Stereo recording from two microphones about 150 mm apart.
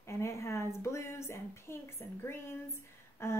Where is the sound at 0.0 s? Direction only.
20° left (ahead or behind).